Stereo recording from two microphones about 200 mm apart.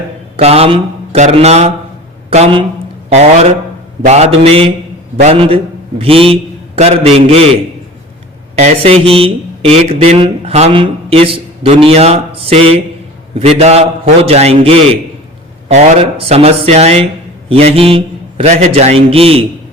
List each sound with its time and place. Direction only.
0.3 s a man's voice: 30° right (ahead or behind)